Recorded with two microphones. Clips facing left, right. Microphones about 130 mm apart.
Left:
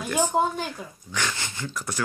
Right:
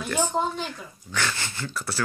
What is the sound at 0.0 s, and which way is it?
Speech, 10° left (ahead or behind).